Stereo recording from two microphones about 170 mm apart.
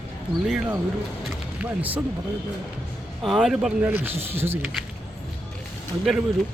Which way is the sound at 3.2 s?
Centre (ahead or behind).